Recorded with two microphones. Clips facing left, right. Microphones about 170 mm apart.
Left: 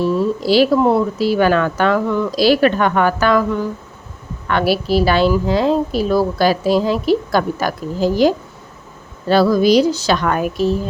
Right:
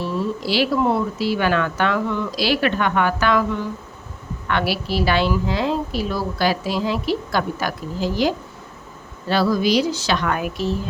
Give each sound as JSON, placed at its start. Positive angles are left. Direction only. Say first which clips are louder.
{"t": 0.0, "sound": "speech", "louder": "left 7 dB", "side_deg": 40}
{"t": 4.4, "sound": "speech", "louder": "left 6 dB", "side_deg": 40}
{"t": 9.3, "sound": "a woman's voice", "louder": "left 6 dB", "side_deg": 45}